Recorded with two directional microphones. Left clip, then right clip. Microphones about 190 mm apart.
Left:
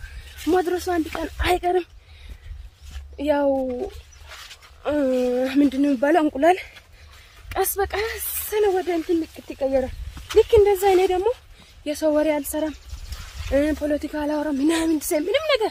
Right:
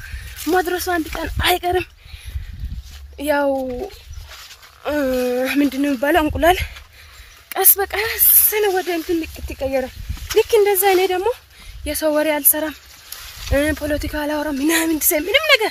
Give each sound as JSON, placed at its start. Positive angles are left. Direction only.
{"t": 0.5, "sound": "speech", "side_deg": -5}
{"t": 3.2, "sound": "speech", "side_deg": -5}
{"t": 3.6, "sound": "a sound", "side_deg": -15}
{"t": 4.8, "sound": "speech", "side_deg": -10}
{"t": 7.4, "sound": "speech", "side_deg": -20}